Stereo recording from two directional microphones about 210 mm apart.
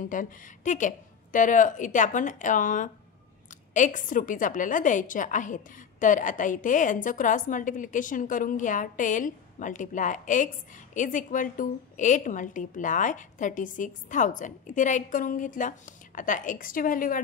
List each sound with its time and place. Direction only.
0.0 s a woman's voice: 40° left (ahead or behind)